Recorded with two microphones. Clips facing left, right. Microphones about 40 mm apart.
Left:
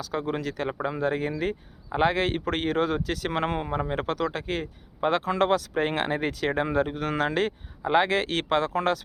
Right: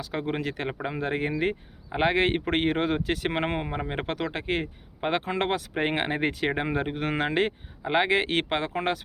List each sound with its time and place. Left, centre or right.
0.0 s speech: right